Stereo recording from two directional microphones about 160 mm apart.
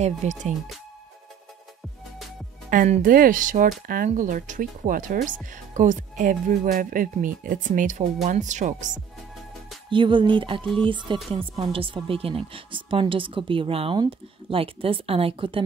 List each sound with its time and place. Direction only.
0.0 s speech: 45° right (ahead or behind)
2.7 s speech: 55° right (ahead or behind)
9.8 s speech: 30° right (ahead or behind)